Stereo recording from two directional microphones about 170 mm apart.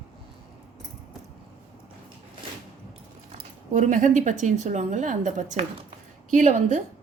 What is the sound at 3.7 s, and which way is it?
A woman's voice, 50° right (ahead or behind).